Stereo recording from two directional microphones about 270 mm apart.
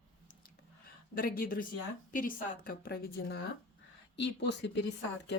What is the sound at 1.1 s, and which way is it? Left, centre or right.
Speech, left.